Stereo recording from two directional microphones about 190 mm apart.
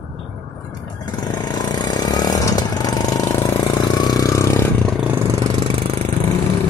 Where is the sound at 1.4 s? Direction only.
20° left (ahead or behind).